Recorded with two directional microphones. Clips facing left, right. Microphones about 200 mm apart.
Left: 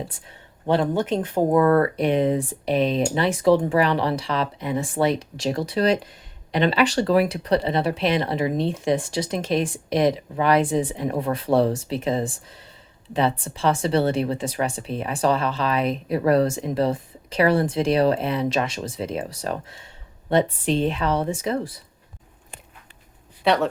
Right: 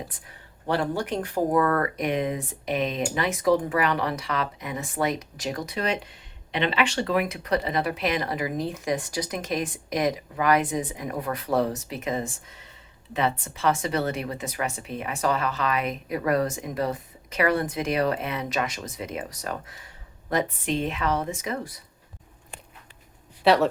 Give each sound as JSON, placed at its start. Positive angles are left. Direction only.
{"t": 0.3, "sound": "speech", "side_deg": 20}
{"t": 23.4, "sound": "speech", "side_deg": 0}